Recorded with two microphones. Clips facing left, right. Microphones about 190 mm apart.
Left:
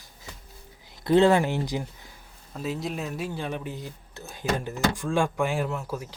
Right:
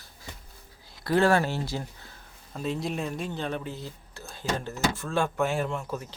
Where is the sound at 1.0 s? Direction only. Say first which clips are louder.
Left 3 dB; 20° left (ahead or behind).